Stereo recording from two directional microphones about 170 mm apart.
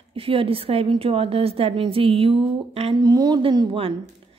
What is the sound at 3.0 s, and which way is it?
Speech, 20° right (ahead or behind).